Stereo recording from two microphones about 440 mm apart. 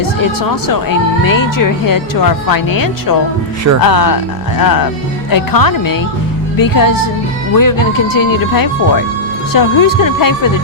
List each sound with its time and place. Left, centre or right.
0.7 s speech: left